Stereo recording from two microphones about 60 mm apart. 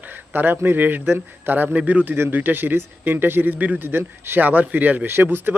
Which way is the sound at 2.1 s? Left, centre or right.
Right.